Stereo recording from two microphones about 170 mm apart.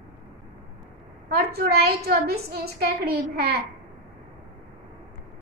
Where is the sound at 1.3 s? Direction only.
65° right (ahead or behind).